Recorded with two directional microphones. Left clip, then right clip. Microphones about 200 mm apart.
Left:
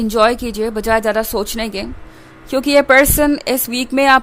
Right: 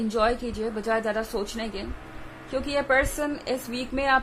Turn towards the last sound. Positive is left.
turn(degrees=55)  # may be behind; listen again after turning